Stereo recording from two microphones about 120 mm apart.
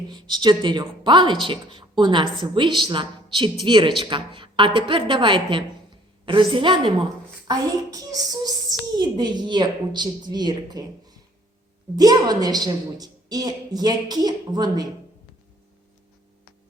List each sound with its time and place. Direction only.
0.1 s a woman's voice: 40° right (ahead or behind)
7.4 s a woman's voice: 30° right (ahead or behind)